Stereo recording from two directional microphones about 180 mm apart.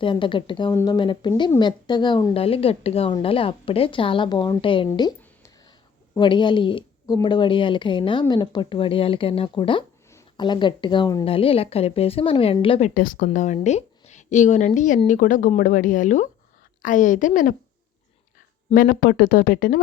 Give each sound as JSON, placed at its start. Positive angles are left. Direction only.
{"t": 0.0, "sound": "a woman's voice", "side_deg": 25}
{"t": 4.9, "sound": "a sound", "side_deg": 20}
{"t": 6.1, "sound": "a woman's voice", "side_deg": 25}
{"t": 12.9, "sound": "speech", "side_deg": 50}
{"t": 18.7, "sound": "speech", "side_deg": 55}